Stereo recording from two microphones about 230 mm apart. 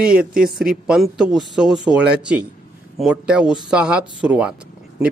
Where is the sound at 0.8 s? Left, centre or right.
Centre.